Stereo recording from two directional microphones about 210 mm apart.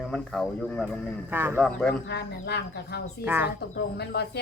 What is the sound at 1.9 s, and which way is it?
Speech, 50° left (ahead or behind).